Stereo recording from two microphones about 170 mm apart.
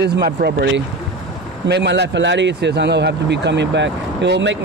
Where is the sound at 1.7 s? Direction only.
90° right.